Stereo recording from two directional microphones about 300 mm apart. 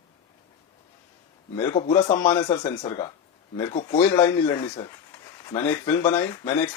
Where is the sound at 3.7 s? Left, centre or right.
Left.